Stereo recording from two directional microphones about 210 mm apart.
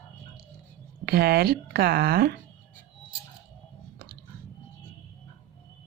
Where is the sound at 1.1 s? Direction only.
50° right (ahead or behind).